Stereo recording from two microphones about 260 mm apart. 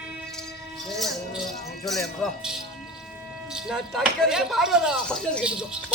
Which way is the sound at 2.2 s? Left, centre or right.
Centre.